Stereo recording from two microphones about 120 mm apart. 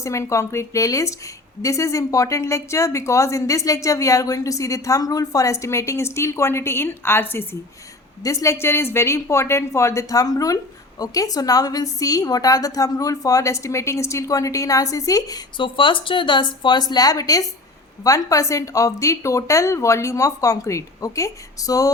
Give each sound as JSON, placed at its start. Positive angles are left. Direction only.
{"t": 0.0, "sound": "a woman's voice", "side_deg": 25}
{"t": 15.5, "sound": "a woman's voice", "side_deg": 45}